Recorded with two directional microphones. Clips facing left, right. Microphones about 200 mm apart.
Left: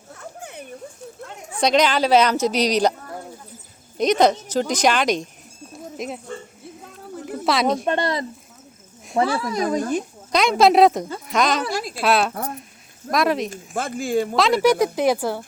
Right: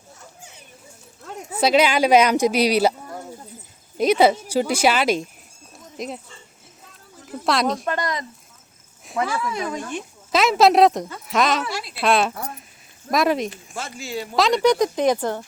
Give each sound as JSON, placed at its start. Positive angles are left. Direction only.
{"t": 0.1, "sound": "a sound", "side_deg": 60}
{"t": 1.5, "sound": "speech", "side_deg": -5}
{"t": 3.9, "sound": "a woman's voice", "side_deg": -5}
{"t": 6.8, "sound": "a sound", "side_deg": 55}
{"t": 7.4, "sound": "a woman's voice", "side_deg": 0}
{"t": 7.9, "sound": "speech", "side_deg": 30}
{"t": 10.3, "sound": "a woman's voice", "side_deg": 0}
{"t": 11.6, "sound": "speech", "side_deg": 45}
{"t": 12.0, "sound": "a woman's voice", "side_deg": 0}
{"t": 13.5, "sound": "speech", "side_deg": 50}
{"t": 14.3, "sound": "speech", "side_deg": 5}